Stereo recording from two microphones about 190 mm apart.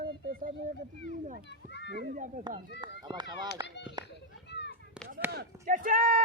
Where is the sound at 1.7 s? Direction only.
65° left (ahead or behind).